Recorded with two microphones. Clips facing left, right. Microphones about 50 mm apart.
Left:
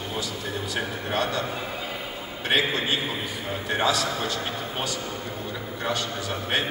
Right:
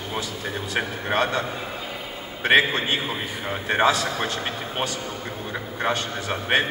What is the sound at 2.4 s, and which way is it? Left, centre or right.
A man's voice, right.